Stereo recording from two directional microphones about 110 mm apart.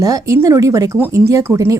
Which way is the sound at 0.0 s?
30° right (ahead or behind).